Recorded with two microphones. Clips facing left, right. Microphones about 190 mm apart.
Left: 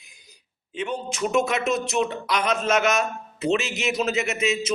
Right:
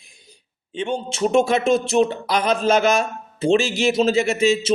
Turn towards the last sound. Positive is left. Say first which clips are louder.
# right 7 dB
turn(degrees=-30)  # may be behind; listen again after turning